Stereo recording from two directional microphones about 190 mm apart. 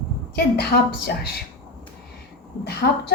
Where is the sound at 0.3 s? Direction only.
55° left (ahead or behind).